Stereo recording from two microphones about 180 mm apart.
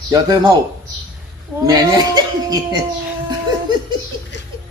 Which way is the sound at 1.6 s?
20° right (ahead or behind).